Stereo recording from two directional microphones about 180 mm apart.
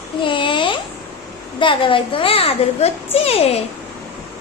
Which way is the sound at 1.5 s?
25° left (ahead or behind).